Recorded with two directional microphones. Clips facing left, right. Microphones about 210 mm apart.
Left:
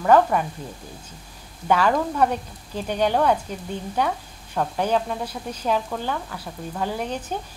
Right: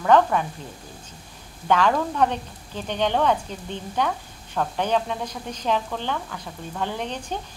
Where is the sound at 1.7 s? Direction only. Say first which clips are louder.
Left 1 dB; 5° left (ahead or behind).